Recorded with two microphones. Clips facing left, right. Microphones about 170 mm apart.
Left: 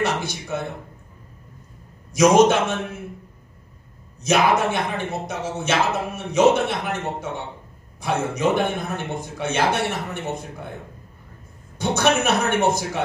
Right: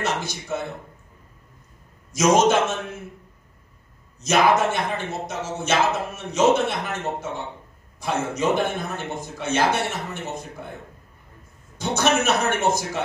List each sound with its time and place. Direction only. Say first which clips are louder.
0.0 s speech: left 3 dB; 55° left (ahead or behind)
2.1 s speech: left 3 dB; 55° left (ahead or behind)
4.2 s speech: even; 55° left (ahead or behind)
11.8 s speech: left 1 dB; 55° left (ahead or behind)